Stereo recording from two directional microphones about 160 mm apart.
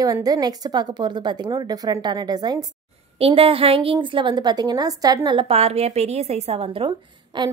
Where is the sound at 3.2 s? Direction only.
35° right (ahead or behind).